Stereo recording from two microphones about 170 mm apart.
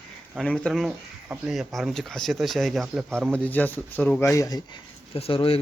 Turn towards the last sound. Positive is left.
turn(degrees=35)  # may be behind; listen again after turning